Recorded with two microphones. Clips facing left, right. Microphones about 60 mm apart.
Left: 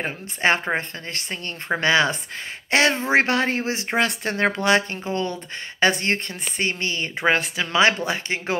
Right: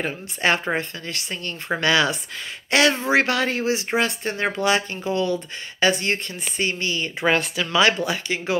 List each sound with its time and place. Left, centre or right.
0.0 s speech: left
3.9 s speech: left
7.2 s speech: left